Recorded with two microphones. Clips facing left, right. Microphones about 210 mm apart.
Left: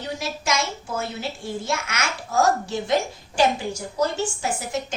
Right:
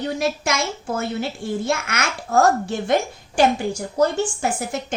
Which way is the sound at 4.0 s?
55° right (ahead or behind).